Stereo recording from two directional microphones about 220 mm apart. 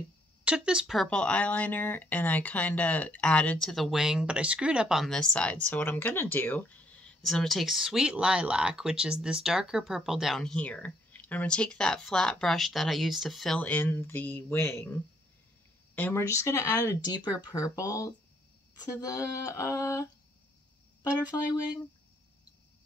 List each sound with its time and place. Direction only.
0.5 s speech: 5° right (ahead or behind)
15.9 s speech: 10° left (ahead or behind)